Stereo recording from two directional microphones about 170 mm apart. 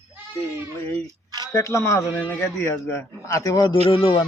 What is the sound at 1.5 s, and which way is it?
A man's voice, 15° left (ahead or behind).